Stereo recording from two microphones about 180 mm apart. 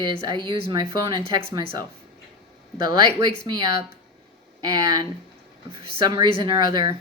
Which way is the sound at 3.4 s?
20° right (ahead or behind).